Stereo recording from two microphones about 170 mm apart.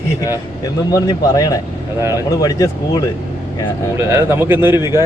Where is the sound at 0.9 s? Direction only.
20° left (ahead or behind).